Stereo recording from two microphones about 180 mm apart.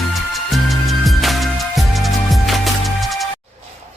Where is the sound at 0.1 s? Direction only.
Centre (ahead or behind).